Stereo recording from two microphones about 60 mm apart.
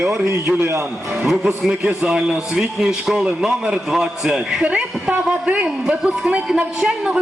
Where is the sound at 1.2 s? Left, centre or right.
Centre.